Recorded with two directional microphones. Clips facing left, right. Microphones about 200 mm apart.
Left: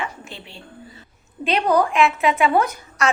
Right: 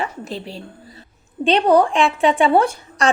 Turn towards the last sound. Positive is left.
turn(degrees=-30)  # may be behind; listen again after turning